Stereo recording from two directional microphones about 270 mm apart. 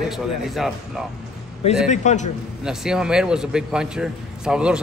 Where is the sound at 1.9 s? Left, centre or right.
Left.